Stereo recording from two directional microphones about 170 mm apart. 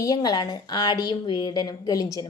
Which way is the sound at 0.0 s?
20° left (ahead or behind).